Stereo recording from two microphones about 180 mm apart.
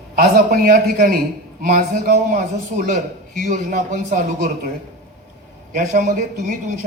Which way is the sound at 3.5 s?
45° right (ahead or behind).